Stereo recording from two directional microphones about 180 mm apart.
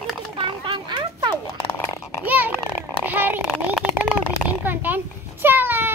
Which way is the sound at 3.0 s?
10° right (ahead or behind).